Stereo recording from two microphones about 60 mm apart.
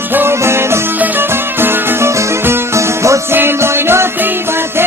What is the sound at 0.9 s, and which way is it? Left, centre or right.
Music, right.